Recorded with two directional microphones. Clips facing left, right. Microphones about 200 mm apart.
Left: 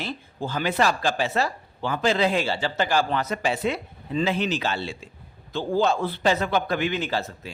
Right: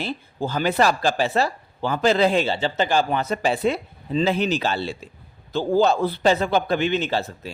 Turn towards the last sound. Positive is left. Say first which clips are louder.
# right 3 dB
turn(degrees=-30)  # may be behind; listen again after turning